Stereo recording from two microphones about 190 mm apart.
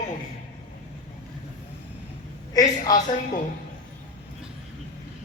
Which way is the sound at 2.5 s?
20° left (ahead or behind).